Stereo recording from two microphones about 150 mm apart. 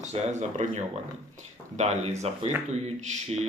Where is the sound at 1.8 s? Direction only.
45° right (ahead or behind).